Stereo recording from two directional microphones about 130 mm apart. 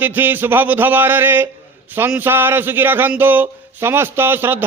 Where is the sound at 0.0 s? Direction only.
15° right (ahead or behind).